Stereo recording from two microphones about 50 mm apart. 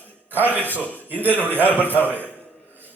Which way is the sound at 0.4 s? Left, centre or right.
Left.